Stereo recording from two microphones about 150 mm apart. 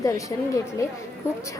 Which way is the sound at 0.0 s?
20° left (ahead or behind).